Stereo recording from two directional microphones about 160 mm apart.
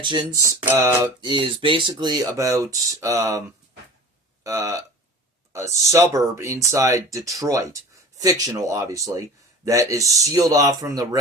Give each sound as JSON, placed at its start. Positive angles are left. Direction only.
{"t": 0.0, "sound": "speech", "side_deg": -30}
{"t": 1.2, "sound": "speech", "side_deg": -30}
{"t": 4.4, "sound": "speech", "side_deg": -20}